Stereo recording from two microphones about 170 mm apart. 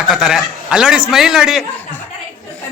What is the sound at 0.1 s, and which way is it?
Speech, centre (ahead or behind).